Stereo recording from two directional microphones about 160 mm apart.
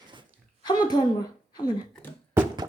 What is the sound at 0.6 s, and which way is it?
A woman's voice, 25° left (ahead or behind).